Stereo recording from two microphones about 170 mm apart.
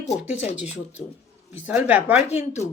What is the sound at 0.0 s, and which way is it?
Speech, 40° left (ahead or behind).